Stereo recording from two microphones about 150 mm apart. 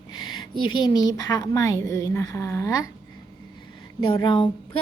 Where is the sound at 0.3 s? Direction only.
30° left (ahead or behind).